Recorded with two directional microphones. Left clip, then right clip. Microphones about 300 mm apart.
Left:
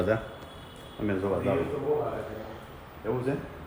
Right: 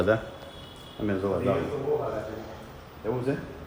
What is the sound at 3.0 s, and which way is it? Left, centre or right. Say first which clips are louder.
Speech: right 1 dB; centre.